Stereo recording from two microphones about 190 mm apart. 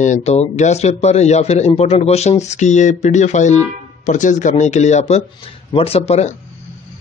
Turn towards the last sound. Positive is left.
turn(degrees=35)  # may be behind; listen again after turning